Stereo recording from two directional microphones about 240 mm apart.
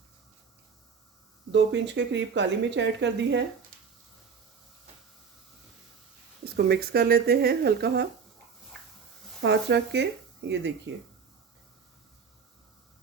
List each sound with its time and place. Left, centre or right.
1.5 s speech: right
6.4 s speech: right
9.4 s speech: right